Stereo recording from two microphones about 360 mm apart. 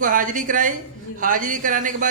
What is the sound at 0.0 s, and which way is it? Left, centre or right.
A man's voice, right.